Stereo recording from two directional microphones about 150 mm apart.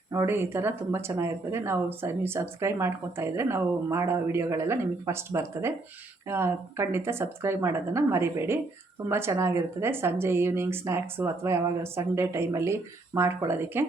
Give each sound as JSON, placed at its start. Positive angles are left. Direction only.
{"t": 0.1, "sound": "speech", "side_deg": -20}